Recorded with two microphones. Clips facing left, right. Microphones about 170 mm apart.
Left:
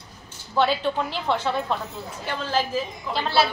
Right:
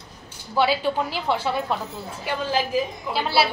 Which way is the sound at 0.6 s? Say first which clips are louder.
Right 1 dB; 5° right (ahead or behind).